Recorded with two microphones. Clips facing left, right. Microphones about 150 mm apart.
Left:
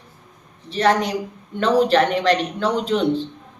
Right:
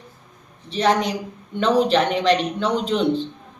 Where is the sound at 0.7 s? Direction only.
20° right (ahead or behind).